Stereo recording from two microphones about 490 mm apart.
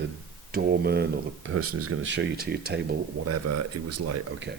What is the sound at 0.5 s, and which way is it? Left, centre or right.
Speech, centre.